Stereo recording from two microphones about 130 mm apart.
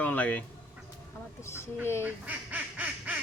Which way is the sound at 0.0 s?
10° left (ahead or behind).